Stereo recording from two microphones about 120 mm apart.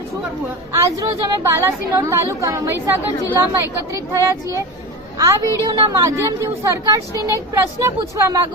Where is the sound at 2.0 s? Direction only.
25° right (ahead or behind).